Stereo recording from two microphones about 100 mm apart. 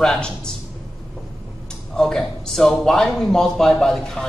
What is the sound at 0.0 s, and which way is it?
Speech, 5° left (ahead or behind).